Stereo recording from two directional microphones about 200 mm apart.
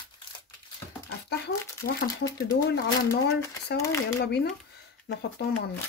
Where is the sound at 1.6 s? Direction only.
15° left (ahead or behind).